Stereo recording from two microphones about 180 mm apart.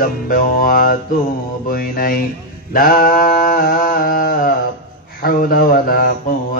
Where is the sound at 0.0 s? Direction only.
50° left (ahead or behind).